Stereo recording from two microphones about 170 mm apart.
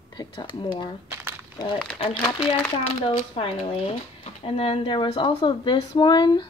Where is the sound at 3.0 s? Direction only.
30° left (ahead or behind).